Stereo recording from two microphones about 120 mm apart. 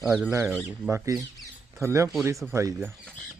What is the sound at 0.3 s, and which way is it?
Speech, 20° right (ahead or behind).